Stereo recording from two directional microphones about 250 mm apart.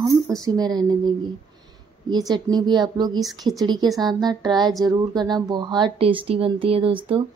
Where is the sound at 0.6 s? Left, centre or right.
Centre.